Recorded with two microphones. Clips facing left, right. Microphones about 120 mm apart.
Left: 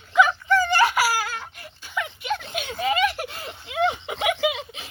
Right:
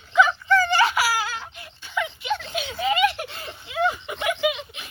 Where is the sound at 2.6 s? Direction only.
45° left (ahead or behind).